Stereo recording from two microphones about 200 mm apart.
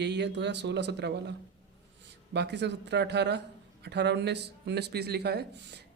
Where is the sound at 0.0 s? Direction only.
60° right (ahead or behind).